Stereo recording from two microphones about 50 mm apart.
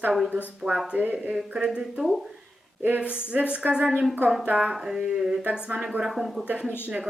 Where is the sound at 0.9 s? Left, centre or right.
Right.